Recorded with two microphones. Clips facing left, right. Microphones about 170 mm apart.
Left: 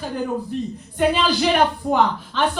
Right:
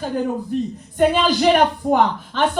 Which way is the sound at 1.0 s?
45° right (ahead or behind).